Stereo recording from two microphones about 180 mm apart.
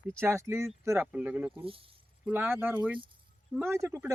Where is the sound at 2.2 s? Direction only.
10° right (ahead or behind).